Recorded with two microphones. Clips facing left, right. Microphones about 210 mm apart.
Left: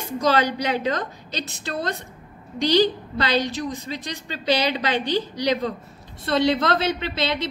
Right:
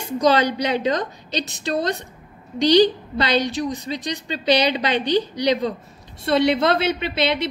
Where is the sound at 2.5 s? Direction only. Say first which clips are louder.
Right 4 dB; 15° right (ahead or behind).